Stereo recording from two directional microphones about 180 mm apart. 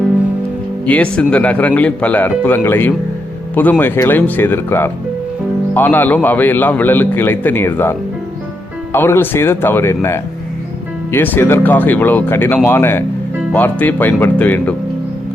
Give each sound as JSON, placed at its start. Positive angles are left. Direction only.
{"t": 0.9, "sound": "a man's voice", "side_deg": 5}